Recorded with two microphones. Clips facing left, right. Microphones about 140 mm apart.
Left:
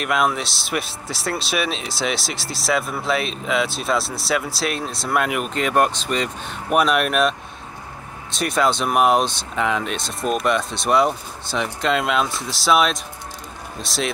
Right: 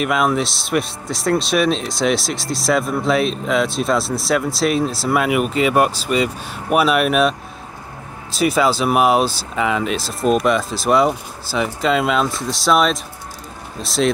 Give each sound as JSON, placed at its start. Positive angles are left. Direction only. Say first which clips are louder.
{"t": 0.0, "sound": "speech", "louder": "right 3 dB", "side_deg": 0}